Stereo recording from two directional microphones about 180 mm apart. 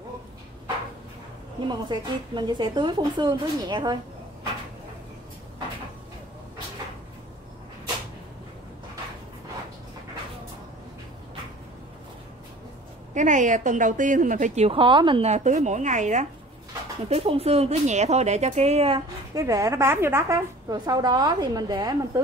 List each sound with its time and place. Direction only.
1.7 s a woman's voice: 25° right (ahead or behind)
13.1 s a woman's voice: 45° right (ahead or behind)
19.3 s a woman's voice: 20° right (ahead or behind)